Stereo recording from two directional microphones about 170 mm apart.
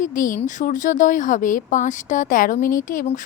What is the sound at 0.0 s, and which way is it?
A woman's voice, 50° left (ahead or behind).